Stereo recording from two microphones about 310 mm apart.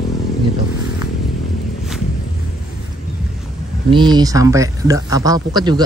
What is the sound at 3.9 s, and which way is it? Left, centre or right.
Speech, centre.